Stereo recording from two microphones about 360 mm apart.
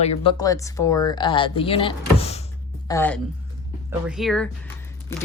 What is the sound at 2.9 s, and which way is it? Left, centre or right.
Speech, centre.